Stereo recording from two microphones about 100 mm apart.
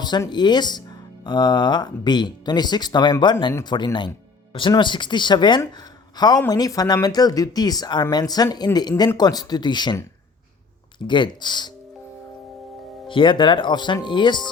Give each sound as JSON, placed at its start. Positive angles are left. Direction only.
{"t": 0.3, "sound": "speech", "side_deg": 45}
{"t": 11.0, "sound": "speech", "side_deg": 50}
{"t": 13.1, "sound": "speech", "side_deg": 55}